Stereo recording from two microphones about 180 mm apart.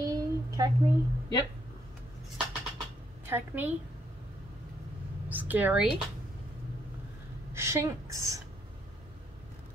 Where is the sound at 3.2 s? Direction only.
10° right (ahead or behind).